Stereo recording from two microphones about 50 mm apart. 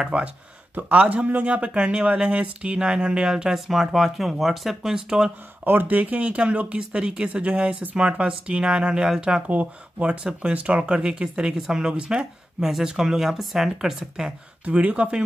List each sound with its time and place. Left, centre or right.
0.1 s speech: right
5.6 s speech: right; by 14.3 s centre
14.6 s speech: right